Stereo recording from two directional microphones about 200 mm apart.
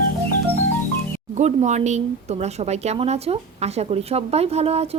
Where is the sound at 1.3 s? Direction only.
35° right (ahead or behind).